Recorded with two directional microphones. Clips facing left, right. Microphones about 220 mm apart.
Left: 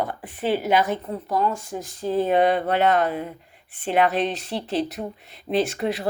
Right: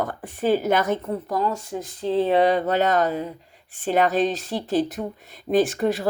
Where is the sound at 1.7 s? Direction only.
20° right (ahead or behind); by 6.0 s 45° right (ahead or behind).